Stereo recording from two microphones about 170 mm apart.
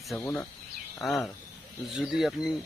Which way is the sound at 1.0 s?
Centre (ahead or behind).